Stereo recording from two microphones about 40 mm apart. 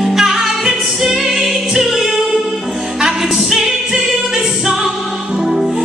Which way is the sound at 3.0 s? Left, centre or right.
Centre.